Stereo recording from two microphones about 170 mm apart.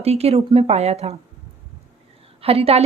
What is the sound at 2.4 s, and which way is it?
Speech, 35° right (ahead or behind).